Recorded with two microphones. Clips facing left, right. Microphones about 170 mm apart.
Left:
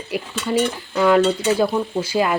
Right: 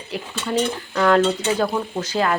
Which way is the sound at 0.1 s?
10° left (ahead or behind).